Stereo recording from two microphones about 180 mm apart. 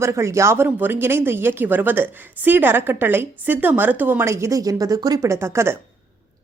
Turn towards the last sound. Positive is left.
turn(degrees=-15)  # may be behind; listen again after turning